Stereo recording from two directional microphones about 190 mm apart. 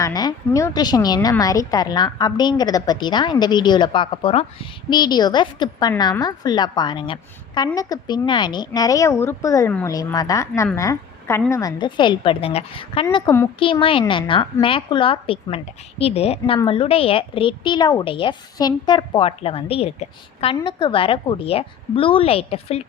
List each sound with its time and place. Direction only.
0.0 s speech: 20° left (ahead or behind)